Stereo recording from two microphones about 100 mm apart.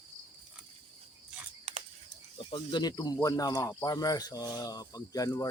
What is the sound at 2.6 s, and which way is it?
Speech, 45° left (ahead or behind).